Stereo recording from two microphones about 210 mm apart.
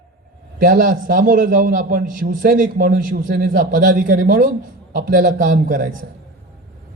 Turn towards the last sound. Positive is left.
turn(degrees=-40)  # may be behind; listen again after turning